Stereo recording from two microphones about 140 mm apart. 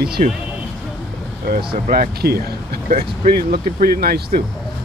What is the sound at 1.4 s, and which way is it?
Speech, 85° right.